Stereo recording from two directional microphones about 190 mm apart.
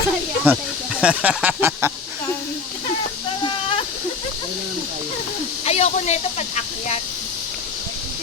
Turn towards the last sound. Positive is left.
turn(degrees=35)  # may be behind; listen again after turning